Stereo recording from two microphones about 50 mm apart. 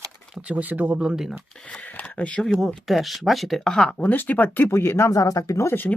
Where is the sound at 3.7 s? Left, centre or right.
Centre.